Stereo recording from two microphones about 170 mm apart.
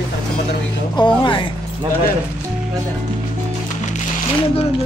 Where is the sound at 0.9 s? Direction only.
30° left (ahead or behind).